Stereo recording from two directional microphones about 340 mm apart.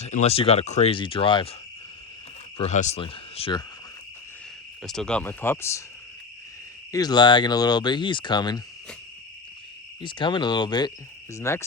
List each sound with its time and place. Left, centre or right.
0.0 s speech: centre
2.6 s speech: centre
4.8 s speech: centre
6.9 s speech: centre
10.0 s speech: centre